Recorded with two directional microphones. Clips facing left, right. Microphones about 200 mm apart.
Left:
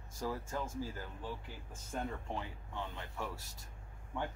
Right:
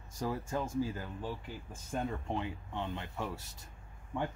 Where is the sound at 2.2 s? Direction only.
20° right (ahead or behind).